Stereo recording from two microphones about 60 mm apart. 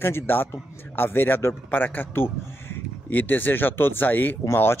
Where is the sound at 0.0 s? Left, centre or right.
Left.